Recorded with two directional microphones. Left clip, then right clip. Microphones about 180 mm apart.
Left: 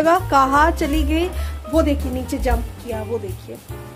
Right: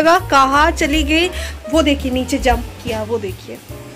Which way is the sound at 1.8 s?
10° right (ahead or behind).